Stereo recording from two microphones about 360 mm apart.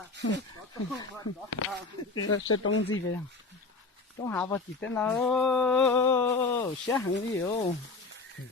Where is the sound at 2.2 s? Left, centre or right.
Left.